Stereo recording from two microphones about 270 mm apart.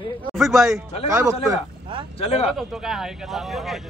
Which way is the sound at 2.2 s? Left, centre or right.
Left.